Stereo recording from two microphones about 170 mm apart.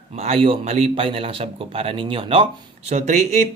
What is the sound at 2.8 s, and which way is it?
Speech, 45° right (ahead or behind).